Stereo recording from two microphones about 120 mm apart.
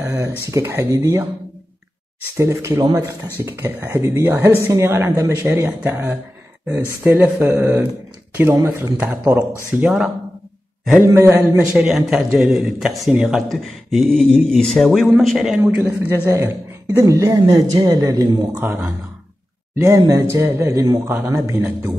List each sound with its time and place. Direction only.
0.0 s a sound: 15° right (ahead or behind)
0.5 s speech: 20° right (ahead or behind)
2.3 s speech: 25° right (ahead or behind); by 10.1 s 5° right (ahead or behind)
11.0 s speech: 20° right (ahead or behind)
11.7 s speech: 5° right (ahead or behind)
15.6 s speech: 20° right (ahead or behind)
20.1 s speech: 25° right (ahead or behind)